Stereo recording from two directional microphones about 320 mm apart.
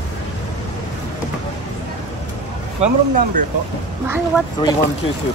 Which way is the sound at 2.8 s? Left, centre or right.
Right.